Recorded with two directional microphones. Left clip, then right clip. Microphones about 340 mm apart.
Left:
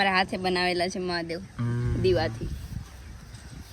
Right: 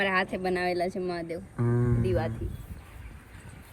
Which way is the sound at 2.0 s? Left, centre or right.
Left.